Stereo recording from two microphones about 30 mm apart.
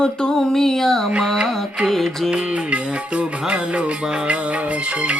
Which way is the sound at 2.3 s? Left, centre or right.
Right.